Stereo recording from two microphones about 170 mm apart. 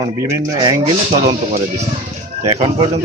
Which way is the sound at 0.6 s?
30° right (ahead or behind).